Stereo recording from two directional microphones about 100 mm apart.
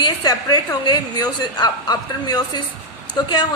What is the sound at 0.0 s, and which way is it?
A woman's voice, 45° left (ahead or behind).